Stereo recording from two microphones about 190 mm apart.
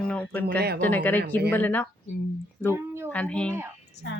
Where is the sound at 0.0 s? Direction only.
5° left (ahead or behind).